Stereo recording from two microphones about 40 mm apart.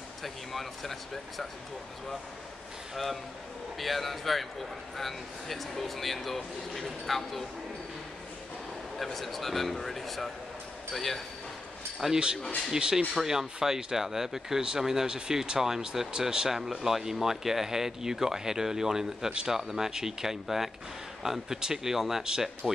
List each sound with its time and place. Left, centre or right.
0.2 s speech: centre
3.7 s speech: centre
8.9 s speech: centre
12.0 s speech: centre
16.5 s speech: centre
22.2 s speech: centre